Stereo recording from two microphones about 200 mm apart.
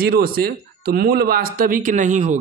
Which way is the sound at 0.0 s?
50° right (ahead or behind).